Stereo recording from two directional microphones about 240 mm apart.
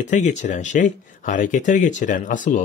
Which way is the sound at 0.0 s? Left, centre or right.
Left.